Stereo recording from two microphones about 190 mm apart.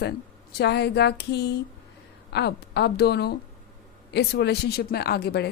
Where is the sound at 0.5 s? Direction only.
60° left (ahead or behind).